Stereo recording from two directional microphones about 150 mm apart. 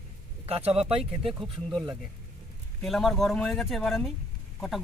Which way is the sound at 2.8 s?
Centre (ahead or behind).